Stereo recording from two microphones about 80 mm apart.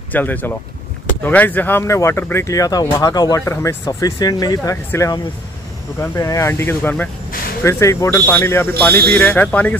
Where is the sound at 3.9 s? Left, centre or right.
Left.